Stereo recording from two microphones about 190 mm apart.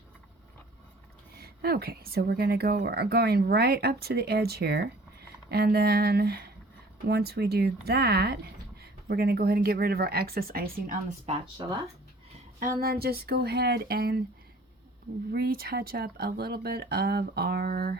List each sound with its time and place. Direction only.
1.3 s a woman's voice: 55° right (ahead or behind)
11.3 s speech: 25° right (ahead or behind)
12.8 s a woman's voice: 55° right (ahead or behind)
15.3 s a woman's voice: 55° right (ahead or behind)